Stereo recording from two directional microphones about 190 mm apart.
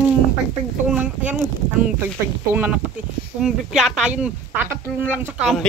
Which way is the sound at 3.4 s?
5° right (ahead or behind).